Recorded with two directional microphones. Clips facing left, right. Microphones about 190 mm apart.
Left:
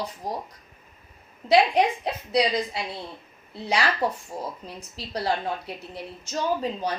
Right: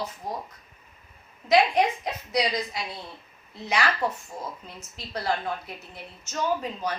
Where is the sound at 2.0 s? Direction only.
30° left (ahead or behind).